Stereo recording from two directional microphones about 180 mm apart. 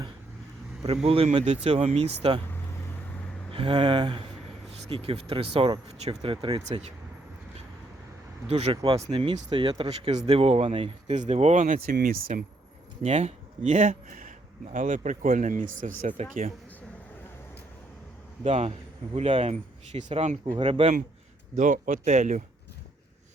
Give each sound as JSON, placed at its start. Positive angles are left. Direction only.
{"t": 1.0, "sound": "speech", "side_deg": -30}
{"t": 3.5, "sound": "speech", "side_deg": -30}
{"t": 8.4, "sound": "speech", "side_deg": -35}
{"t": 13.0, "sound": "speech", "side_deg": -35}
{"t": 18.4, "sound": "speech", "side_deg": -35}
{"t": 20.4, "sound": "speech", "side_deg": -25}
{"t": 21.5, "sound": "speech", "side_deg": -45}